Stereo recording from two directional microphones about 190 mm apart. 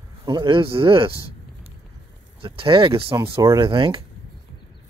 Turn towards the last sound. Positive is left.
turn(degrees=-25)  # may be behind; listen again after turning